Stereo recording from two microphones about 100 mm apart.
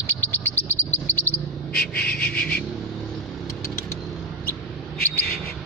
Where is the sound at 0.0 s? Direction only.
20° left (ahead or behind).